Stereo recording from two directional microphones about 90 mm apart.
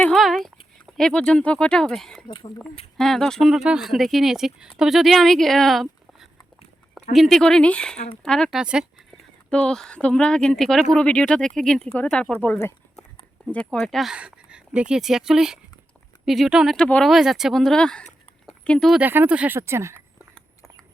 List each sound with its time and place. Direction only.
0.1 s a sound: centre (ahead or behind)
0.9 s a woman's voice: 10° left (ahead or behind)
3.5 s a woman's voice: 5° right (ahead or behind)
8.5 s speech: 10° right (ahead or behind)
9.5 s speech: 10° left (ahead or behind)
13.7 s a woman's voice: 5° left (ahead or behind)
14.1 s a woman's voice: 10° right (ahead or behind)
16.7 s speech: 10° left (ahead or behind)
17.1 s a woman's voice: 5° right (ahead or behind)
18.9 s speech: 20° right (ahead or behind)
19.5 s speech: 30° right (ahead or behind)